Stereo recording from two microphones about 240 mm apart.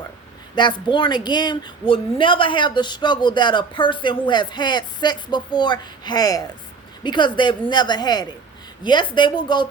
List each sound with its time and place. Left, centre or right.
0.5 s a woman's voice: centre